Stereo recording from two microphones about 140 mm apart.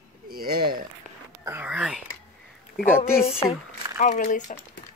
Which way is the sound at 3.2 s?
45° left (ahead or behind).